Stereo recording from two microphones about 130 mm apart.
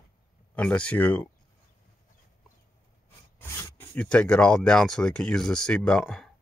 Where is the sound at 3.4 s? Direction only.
20° left (ahead or behind).